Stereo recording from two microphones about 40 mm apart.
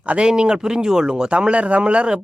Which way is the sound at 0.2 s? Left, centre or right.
Right.